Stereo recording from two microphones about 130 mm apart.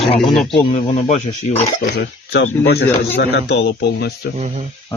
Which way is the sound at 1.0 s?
65° left (ahead or behind).